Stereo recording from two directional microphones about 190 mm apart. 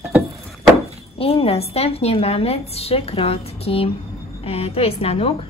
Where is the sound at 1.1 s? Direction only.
30° left (ahead or behind).